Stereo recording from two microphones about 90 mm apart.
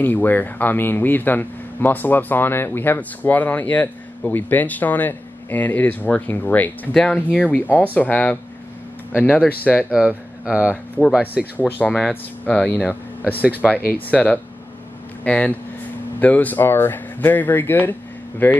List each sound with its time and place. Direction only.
0.0 s a man's voice: 20° left (ahead or behind)
9.8 s speech: 10° right (ahead or behind)
11.6 s a man's voice: 10° left (ahead or behind)